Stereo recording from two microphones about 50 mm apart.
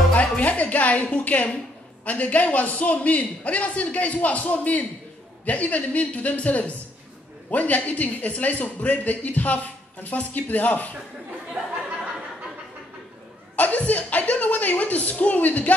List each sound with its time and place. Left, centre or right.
0.4 s a woman's voice: left
13.6 s speech: left